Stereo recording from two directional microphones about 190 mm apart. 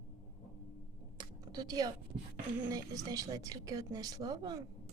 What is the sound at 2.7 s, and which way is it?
Speech, 20° right (ahead or behind).